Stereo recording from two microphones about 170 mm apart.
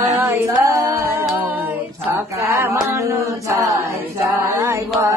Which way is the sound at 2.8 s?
20° right (ahead or behind).